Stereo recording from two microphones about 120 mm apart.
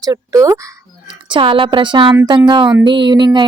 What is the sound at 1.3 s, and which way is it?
Speech, 45° right (ahead or behind).